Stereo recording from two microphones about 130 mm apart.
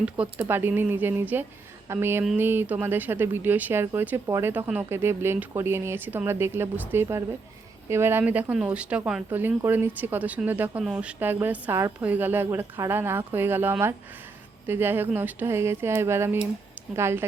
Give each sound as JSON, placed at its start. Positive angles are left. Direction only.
{"t": 0.0, "sound": "speech", "side_deg": -10}